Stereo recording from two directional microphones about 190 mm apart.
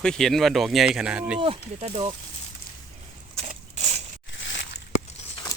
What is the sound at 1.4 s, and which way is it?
Speech, 30° right (ahead or behind).